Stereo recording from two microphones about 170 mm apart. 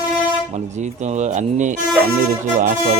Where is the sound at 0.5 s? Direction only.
45° right (ahead or behind).